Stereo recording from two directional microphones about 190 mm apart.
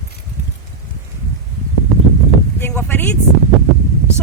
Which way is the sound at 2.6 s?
10° left (ahead or behind).